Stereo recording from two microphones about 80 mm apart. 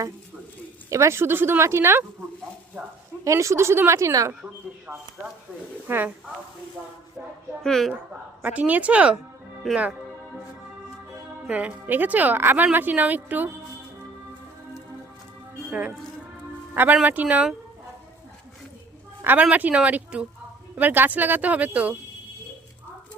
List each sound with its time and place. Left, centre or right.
0.9 s speech: right
3.2 s speech: right
7.6 s speech: centre
8.4 s speech: centre
9.6 s speech: centre
11.4 s speech: centre
16.7 s speech: centre
19.2 s speech: right